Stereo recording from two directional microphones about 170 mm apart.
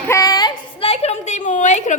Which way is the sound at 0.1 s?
20° left (ahead or behind).